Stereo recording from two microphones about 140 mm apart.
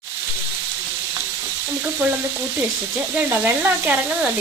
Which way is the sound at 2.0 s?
15° right (ahead or behind).